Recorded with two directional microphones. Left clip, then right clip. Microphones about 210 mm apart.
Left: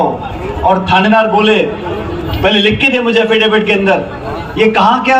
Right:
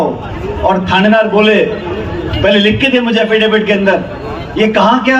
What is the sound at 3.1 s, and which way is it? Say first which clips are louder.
A man's voice: left 1 dB; 20° right (ahead or behind).